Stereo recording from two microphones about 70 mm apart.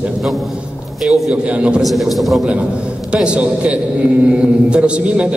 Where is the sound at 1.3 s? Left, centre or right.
Centre.